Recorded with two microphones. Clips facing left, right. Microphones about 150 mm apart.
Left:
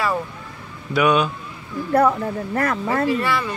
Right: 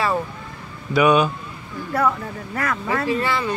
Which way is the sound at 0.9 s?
5° right (ahead or behind).